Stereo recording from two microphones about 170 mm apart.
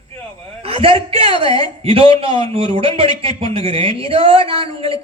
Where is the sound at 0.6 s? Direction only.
35° right (ahead or behind).